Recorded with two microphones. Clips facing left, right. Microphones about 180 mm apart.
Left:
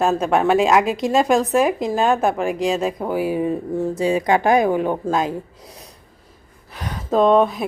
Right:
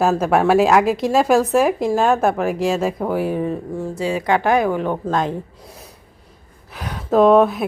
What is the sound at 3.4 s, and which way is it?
A woman's voice, 15° left (ahead or behind).